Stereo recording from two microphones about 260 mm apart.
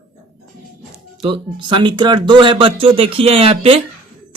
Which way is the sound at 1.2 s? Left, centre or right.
Centre.